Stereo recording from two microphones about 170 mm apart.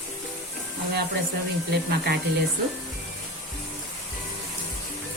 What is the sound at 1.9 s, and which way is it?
Speech, 65° right (ahead or behind).